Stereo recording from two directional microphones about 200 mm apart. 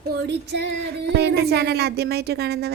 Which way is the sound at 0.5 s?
65° right (ahead or behind).